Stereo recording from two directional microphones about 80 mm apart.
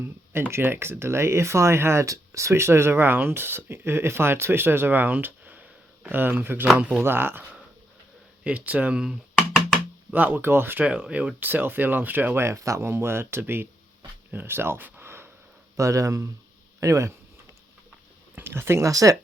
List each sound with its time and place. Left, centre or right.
0.5 s speech: right
8.4 s speech: centre
10.1 s speech: right
10.8 s speech: centre; by 13.7 s right
14.3 s a sound: right
15.7 s speech: right
18.3 s speech: right
18.9 s speech: right